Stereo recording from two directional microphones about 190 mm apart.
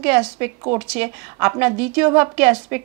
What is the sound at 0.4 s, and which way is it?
A woman's voice, 10° right (ahead or behind).